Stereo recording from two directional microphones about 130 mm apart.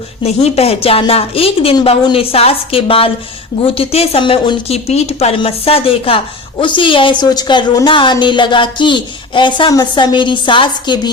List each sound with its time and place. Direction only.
0.3 s a woman's voice: 50° left (ahead or behind)
4.7 s a woman's voice: 55° left (ahead or behind); by 11.1 s 35° left (ahead or behind)